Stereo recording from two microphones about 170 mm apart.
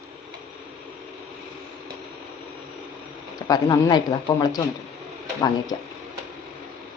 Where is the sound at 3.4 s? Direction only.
20° left (ahead or behind).